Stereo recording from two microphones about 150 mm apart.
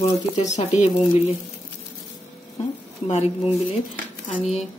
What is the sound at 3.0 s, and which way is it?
Speech, 50° left (ahead or behind).